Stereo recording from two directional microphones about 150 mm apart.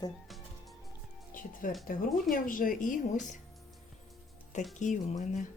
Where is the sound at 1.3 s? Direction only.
65° left (ahead or behind).